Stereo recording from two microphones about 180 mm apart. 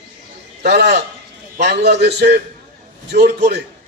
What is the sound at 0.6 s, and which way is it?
A man's voice, 65° right (ahead or behind).